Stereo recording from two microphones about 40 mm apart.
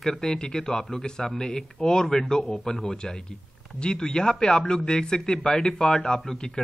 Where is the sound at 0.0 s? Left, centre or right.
Centre.